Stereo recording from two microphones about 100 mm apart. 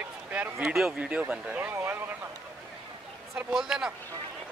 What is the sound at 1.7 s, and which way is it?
Speech, 25° right (ahead or behind).